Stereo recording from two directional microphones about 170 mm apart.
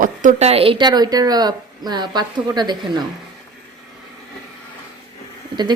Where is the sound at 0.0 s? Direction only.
50° right (ahead or behind); by 3.1 s 25° right (ahead or behind).